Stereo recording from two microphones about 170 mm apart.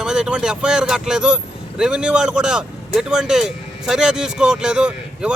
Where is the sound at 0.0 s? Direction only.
5° right (ahead or behind).